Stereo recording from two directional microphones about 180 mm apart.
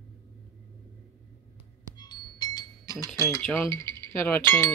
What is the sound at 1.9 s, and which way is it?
Cutlery, 25° left (ahead or behind).